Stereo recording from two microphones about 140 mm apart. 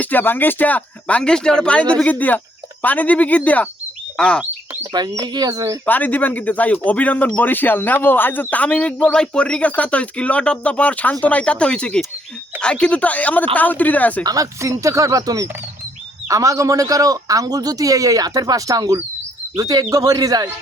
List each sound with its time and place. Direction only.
0.0 s speech: 15° left (ahead or behind)
4.7 s a man's voice: 25° right (ahead or behind)
5.8 s speech: 10° left (ahead or behind)
14.3 s a man's voice: 25° right (ahead or behind)